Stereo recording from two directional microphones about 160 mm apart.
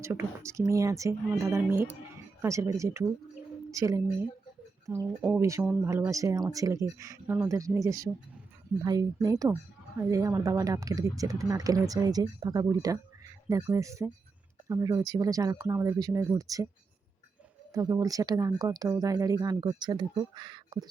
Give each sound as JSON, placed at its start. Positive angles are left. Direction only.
{"t": 0.0, "sound": "speech", "side_deg": -15}
{"t": 17.7, "sound": "speech", "side_deg": -20}